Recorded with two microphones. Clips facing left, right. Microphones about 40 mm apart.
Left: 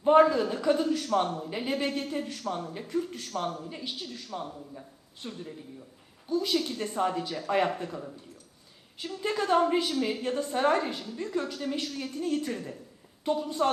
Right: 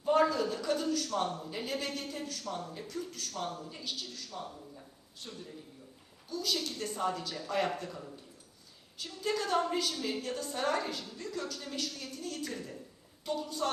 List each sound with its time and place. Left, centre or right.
0.0 s a man's voice: left